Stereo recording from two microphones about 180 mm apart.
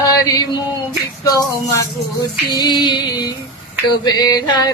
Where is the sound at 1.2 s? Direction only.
20° left (ahead or behind).